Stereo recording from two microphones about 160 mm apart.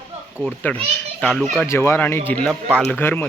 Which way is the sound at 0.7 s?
10° left (ahead or behind).